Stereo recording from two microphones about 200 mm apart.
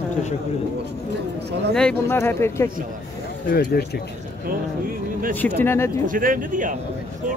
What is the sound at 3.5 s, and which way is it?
Speech, 45° left (ahead or behind).